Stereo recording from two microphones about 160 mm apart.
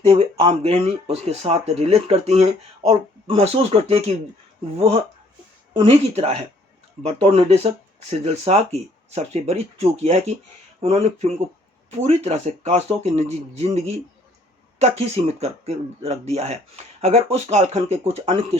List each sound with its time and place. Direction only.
0.0 s speech: 40° right (ahead or behind)